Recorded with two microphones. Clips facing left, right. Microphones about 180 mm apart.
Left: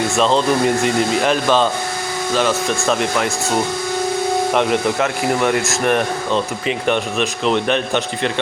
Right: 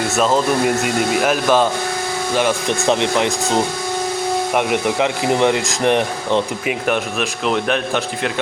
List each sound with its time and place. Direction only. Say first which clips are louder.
0.2 s speech: even; 5° right (ahead or behind)
6.8 s speech: left 2 dB; 5° right (ahead or behind)